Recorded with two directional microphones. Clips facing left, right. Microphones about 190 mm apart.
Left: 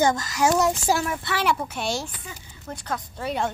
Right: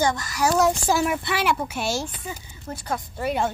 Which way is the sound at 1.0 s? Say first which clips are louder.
Right 3 dB; 15° right (ahead or behind).